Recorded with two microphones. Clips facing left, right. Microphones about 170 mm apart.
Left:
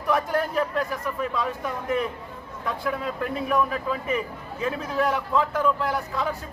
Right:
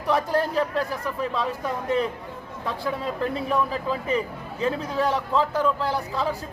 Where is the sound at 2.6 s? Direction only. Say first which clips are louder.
Even; 30° right (ahead or behind).